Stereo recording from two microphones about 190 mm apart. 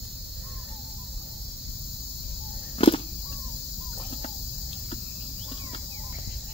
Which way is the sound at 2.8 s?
30° left (ahead or behind).